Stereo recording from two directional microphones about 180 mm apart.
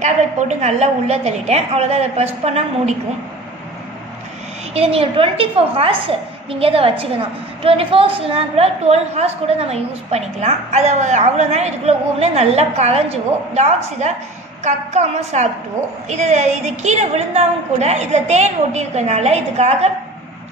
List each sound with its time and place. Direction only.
0.0 s a woman's voice: 40° right (ahead or behind)
4.7 s a woman's voice: 30° right (ahead or behind)